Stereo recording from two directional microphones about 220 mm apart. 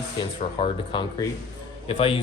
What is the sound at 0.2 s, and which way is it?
Speech, 20° left (ahead or behind).